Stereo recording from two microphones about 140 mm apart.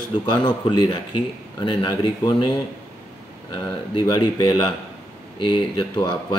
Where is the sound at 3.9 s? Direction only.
35° left (ahead or behind).